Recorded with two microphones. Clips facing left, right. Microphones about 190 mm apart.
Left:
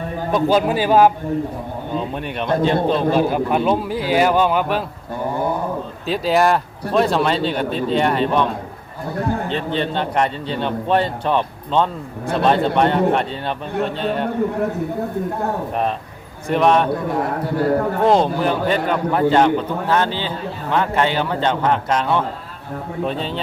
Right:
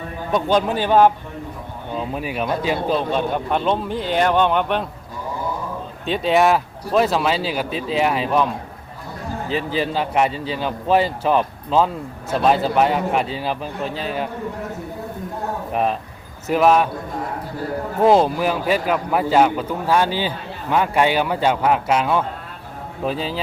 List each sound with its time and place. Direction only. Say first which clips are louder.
0.3 s a man's voice: left 2 dB; 5° left (ahead or behind)
6.1 s a man's voice: even; centre (ahead or behind)
9.1 s a man's voice: left 8 dB; 65° left (ahead or behind)
9.5 s a man's voice: even; 5° right (ahead or behind)
15.7 s a man's voice: right 1 dB; 5° right (ahead or behind)
16.9 s a man's voice: left 7 dB; 70° left (ahead or behind)
18.0 s a man's voice: right 3 dB; 5° right (ahead or behind)